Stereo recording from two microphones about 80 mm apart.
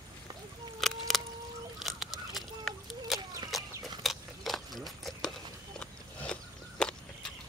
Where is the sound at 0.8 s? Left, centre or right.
Centre.